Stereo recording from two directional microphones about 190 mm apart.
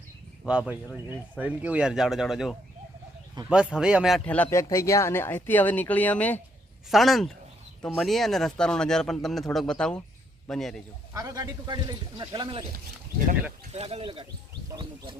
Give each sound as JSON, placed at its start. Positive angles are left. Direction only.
{"t": 0.4, "sound": "speech", "side_deg": -5}
{"t": 4.4, "sound": "a man's voice", "side_deg": 15}
{"t": 11.1, "sound": "a man's voice", "side_deg": -15}
{"t": 13.7, "sound": "speech", "side_deg": -35}